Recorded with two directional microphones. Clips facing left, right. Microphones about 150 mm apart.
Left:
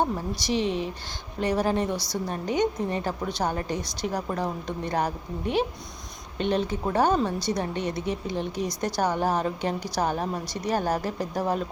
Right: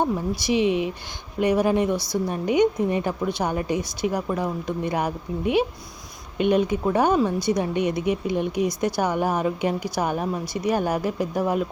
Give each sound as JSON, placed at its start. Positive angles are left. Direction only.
{"t": 0.0, "sound": "a woman's voice", "side_deg": -10}